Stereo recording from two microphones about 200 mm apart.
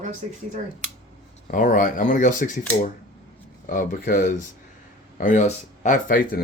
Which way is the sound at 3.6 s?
40° left (ahead or behind).